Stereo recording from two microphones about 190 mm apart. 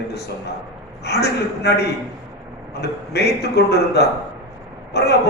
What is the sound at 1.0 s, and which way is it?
A man's voice, 60° left (ahead or behind).